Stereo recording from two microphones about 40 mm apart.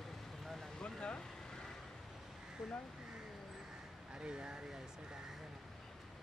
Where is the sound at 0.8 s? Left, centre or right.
Left.